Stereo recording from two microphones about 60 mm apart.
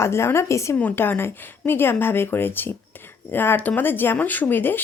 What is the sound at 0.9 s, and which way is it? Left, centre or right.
A woman's voice, left.